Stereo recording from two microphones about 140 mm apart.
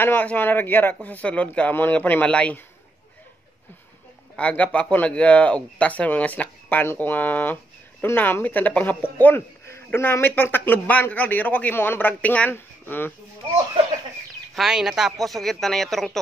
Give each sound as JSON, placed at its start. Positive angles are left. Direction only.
{"t": 0.0, "sound": "speech", "side_deg": 15}
{"t": 4.4, "sound": "speech", "side_deg": 10}
{"t": 14.5, "sound": "speech", "side_deg": -5}